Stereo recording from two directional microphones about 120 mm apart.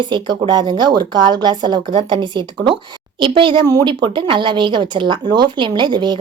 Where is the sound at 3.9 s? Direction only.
40° right (ahead or behind).